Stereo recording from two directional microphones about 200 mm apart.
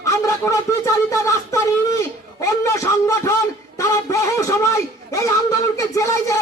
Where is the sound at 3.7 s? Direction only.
15° left (ahead or behind).